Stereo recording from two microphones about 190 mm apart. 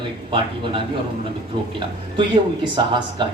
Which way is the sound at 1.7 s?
25° right (ahead or behind).